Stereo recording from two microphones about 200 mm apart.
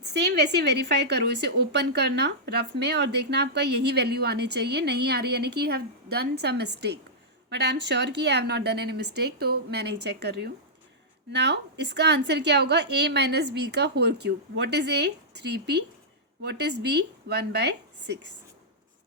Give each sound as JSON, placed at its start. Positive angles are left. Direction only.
{"t": 0.1, "sound": "a woman's voice", "side_deg": -55}